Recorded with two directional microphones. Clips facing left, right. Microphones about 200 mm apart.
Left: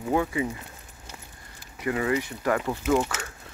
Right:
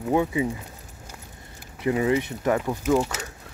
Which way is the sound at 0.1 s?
15° right (ahead or behind).